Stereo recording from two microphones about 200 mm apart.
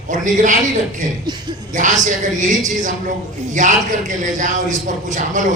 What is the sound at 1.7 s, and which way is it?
A man's voice, 40° right (ahead or behind).